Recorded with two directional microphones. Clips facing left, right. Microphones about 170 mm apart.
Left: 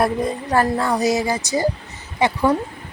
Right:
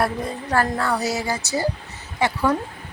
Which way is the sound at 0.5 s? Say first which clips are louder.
Left 2 dB; 15° left (ahead or behind).